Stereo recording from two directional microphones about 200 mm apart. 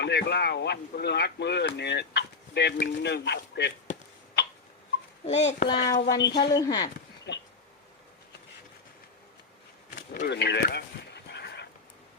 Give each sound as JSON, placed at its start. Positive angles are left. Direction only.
{"t": 0.0, "sound": "speech", "side_deg": 55}
{"t": 5.2, "sound": "a child's voice", "side_deg": 35}
{"t": 5.8, "sound": "speech", "side_deg": 20}
{"t": 6.2, "sound": "speech", "side_deg": 60}
{"t": 6.6, "sound": "speech", "side_deg": 20}
{"t": 7.3, "sound": "a sound", "side_deg": 60}
{"t": 9.9, "sound": "a sound", "side_deg": 50}